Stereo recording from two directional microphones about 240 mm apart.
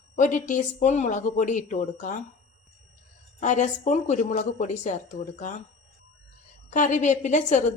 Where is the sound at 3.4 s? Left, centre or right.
Left.